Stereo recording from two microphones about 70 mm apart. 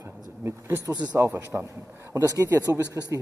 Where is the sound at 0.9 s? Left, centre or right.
Right.